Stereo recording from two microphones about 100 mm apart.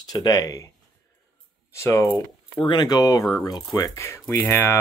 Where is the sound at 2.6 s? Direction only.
45° left (ahead or behind); by 4.8 s 20° left (ahead or behind).